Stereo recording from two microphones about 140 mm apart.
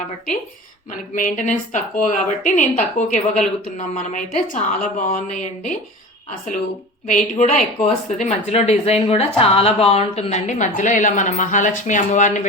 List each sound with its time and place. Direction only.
0.9 s speech: 65° left (ahead or behind)
7.3 s speech: 60° left (ahead or behind)